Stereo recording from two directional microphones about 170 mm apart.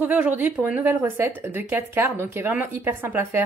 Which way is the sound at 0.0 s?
10° right (ahead or behind).